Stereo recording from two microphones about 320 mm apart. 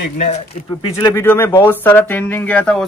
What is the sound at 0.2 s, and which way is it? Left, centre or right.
Speech, centre.